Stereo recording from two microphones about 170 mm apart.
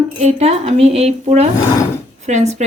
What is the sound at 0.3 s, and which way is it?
Speech, 40° right (ahead or behind).